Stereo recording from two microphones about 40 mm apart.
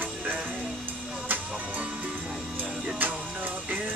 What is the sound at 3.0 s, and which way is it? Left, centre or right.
Music, right.